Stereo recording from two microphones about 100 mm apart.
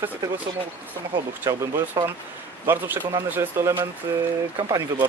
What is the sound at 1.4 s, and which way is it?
Speech, 25° right (ahead or behind).